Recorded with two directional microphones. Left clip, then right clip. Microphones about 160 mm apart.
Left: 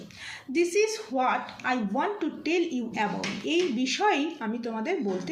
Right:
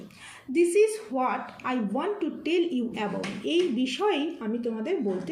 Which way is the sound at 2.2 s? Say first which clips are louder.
Right 1 dB; 40° left (ahead or behind).